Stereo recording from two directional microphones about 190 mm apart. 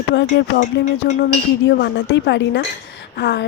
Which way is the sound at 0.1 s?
70° left (ahead or behind).